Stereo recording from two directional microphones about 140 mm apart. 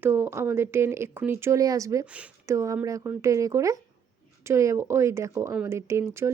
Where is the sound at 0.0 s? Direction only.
15° right (ahead or behind).